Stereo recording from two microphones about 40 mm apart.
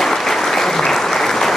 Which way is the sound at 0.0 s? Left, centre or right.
Centre.